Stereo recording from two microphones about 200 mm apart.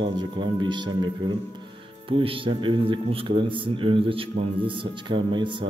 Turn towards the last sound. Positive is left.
turn(degrees=-25)  # may be behind; listen again after turning